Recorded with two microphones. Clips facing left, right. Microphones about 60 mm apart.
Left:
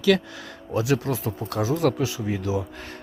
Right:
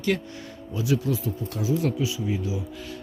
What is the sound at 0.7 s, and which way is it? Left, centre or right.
Speech, left.